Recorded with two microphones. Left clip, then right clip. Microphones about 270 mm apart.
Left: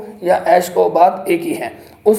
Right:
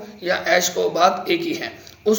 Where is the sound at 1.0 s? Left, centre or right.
Centre.